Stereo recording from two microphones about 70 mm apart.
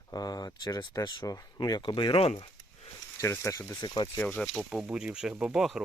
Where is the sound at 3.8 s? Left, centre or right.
Left.